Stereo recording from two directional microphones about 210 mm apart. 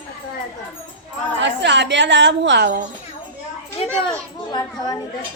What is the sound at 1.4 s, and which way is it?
A woman's voice, 55° right (ahead or behind).